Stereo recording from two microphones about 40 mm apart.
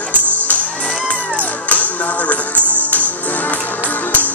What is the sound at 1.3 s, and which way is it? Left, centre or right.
Music, left.